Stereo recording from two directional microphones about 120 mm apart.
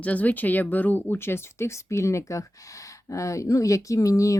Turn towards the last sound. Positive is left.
turn(degrees=25)  # may be behind; listen again after turning